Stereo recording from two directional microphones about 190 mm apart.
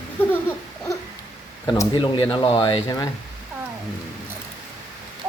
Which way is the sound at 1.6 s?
20° left (ahead or behind).